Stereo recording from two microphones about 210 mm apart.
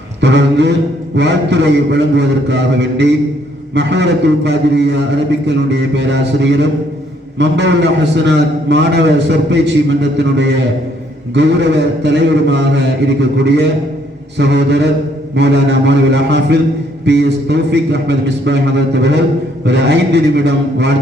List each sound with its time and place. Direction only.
0.2 s a man's voice: 55° right (ahead or behind)